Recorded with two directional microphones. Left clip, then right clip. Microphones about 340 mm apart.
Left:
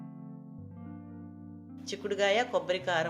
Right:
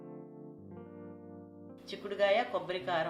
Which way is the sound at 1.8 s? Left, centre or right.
Left.